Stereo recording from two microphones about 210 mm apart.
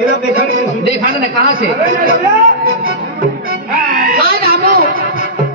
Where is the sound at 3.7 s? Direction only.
45° right (ahead or behind).